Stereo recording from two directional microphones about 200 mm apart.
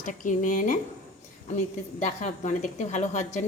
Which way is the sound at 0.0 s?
40° left (ahead or behind).